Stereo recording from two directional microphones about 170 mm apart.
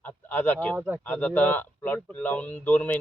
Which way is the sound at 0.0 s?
10° left (ahead or behind).